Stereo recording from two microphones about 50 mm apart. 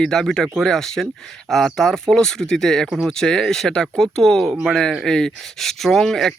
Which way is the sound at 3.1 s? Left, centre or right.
Centre.